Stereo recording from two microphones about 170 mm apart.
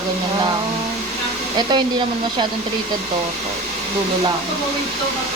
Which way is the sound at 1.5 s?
25° right (ahead or behind).